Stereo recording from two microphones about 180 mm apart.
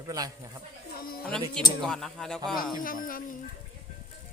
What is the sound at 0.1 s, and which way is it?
Speech, 20° right (ahead or behind).